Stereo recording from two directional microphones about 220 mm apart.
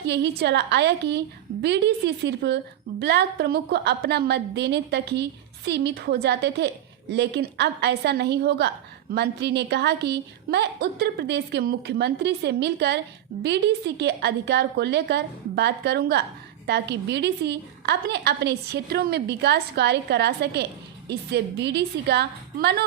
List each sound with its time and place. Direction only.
0.0 s a woman's voice: 50° right (ahead or behind)